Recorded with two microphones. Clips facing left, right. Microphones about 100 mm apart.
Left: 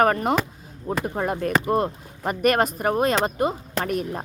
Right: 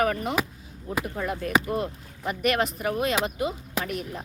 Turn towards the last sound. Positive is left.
turn(degrees=45)  # may be behind; listen again after turning